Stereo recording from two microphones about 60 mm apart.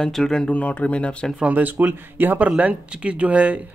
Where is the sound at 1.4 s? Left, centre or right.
Right.